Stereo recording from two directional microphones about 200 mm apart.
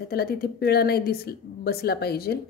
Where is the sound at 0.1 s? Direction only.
50° left (ahead or behind).